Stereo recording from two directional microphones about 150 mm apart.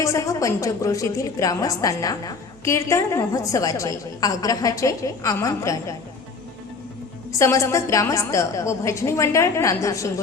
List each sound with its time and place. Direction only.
0.0 s a woman's voice: 20° left (ahead or behind)
7.3 s a woman's voice: 20° left (ahead or behind)